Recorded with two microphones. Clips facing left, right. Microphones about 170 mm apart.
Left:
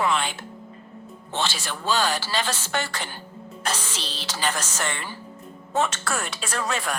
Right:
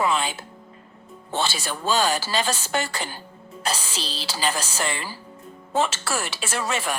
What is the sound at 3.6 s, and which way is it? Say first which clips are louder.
Speech: right 2 dB; 35° right (ahead or behind).